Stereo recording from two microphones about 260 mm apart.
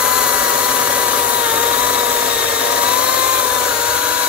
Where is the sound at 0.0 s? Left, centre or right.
Centre.